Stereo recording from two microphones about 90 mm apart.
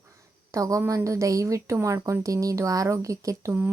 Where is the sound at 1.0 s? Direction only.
35° right (ahead or behind).